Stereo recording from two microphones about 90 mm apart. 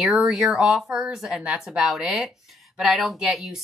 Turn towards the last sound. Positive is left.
turn(degrees=-5)  # may be behind; listen again after turning